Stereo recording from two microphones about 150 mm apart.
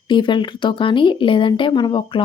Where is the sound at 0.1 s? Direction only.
30° left (ahead or behind).